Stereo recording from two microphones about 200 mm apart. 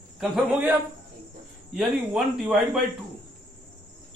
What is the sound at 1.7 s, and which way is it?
A man's voice, 5° right (ahead or behind).